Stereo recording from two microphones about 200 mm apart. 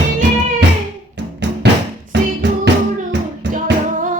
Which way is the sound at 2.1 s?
60° right (ahead or behind).